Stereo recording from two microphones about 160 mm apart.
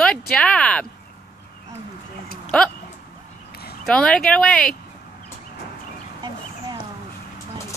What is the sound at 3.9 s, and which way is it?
Speech, 5° left (ahead or behind).